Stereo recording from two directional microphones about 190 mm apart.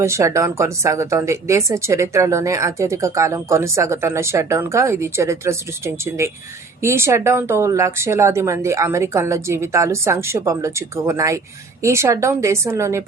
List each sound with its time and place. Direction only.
0.0 s speech: 15° right (ahead or behind)